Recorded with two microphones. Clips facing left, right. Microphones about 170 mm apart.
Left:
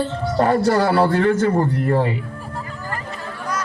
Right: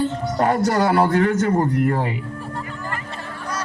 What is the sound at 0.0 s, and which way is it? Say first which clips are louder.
A man's voice: left 1 dB; 30° left (ahead or behind).